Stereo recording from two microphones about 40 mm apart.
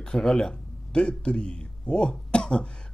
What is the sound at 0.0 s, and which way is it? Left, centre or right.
Speech, centre.